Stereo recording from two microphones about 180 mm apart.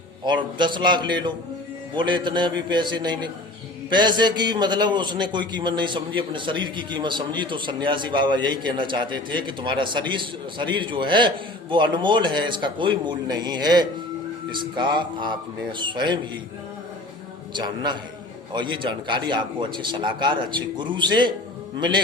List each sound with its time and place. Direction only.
0.3 s a man's voice: 25° right (ahead or behind)
17.5 s a man's voice: 25° right (ahead or behind)